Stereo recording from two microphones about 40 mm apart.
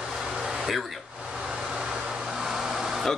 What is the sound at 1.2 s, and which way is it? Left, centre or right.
Vehicle, centre.